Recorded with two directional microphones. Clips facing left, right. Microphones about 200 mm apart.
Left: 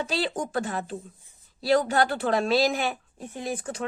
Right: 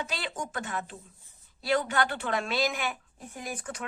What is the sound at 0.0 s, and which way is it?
Speech, 35° left (ahead or behind).